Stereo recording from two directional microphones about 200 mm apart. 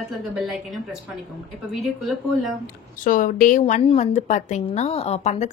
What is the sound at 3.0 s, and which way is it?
A woman's voice, 40° left (ahead or behind).